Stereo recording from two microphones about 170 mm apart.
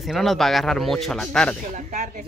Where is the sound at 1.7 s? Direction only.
45° right (ahead or behind).